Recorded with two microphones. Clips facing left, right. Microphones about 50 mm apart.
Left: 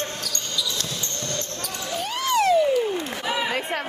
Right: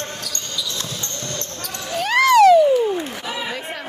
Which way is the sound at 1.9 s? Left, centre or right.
Right.